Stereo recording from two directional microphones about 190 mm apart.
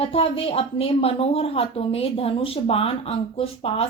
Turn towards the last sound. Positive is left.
turn(degrees=30)  # may be behind; listen again after turning